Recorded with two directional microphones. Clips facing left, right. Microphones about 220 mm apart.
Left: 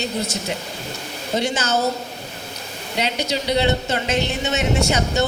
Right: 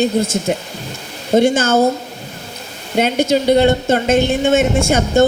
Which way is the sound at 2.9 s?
50° right (ahead or behind).